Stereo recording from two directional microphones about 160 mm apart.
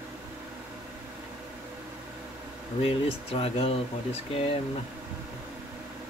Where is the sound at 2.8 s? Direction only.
35° left (ahead or behind).